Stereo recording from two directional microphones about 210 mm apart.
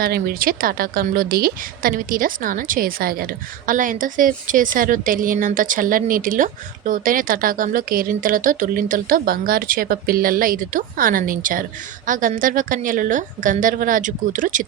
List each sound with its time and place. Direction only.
0.0 s speech: 45° right (ahead or behind)